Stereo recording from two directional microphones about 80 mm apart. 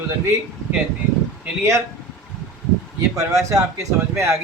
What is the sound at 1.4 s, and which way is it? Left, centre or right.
Speech, right.